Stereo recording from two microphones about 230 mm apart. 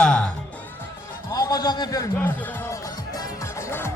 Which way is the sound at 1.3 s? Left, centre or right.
Centre.